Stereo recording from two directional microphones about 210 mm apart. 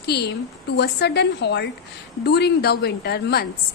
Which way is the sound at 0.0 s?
50° left (ahead or behind).